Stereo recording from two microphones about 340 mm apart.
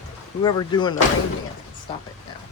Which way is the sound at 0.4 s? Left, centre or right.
Centre.